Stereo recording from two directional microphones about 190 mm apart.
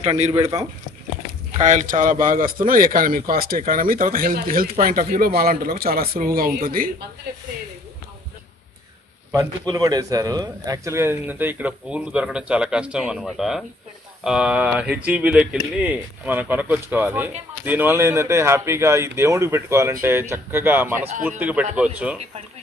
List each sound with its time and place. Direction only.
0.3 s a man's voice: 20° right (ahead or behind)
1.6 s a man's voice: 40° right (ahead or behind)
9.3 s a man's voice: 20° right (ahead or behind)